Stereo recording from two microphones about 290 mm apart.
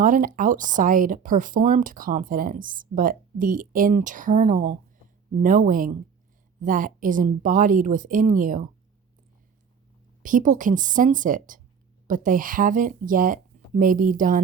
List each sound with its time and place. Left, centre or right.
0.0 s speech: right
10.2 s speech: right